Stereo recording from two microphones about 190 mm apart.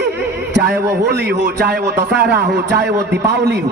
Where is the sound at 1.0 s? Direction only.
65° right (ahead or behind).